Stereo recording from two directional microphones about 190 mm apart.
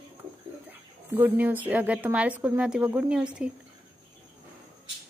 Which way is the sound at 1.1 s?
10° right (ahead or behind).